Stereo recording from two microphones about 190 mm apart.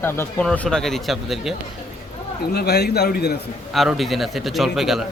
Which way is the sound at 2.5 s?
60° left (ahead or behind).